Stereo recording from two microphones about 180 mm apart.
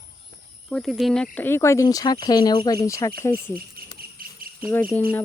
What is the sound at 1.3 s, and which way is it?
Speech, 10° left (ahead or behind).